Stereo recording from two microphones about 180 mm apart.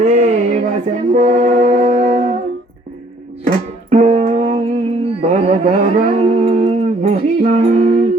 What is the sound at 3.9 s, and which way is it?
Music, 35° right (ahead or behind).